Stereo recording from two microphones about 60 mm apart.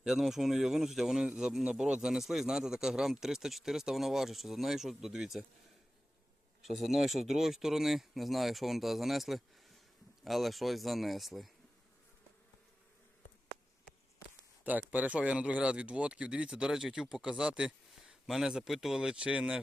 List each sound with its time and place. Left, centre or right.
0.0 s speech: centre
6.6 s speech: centre
14.6 s speech: right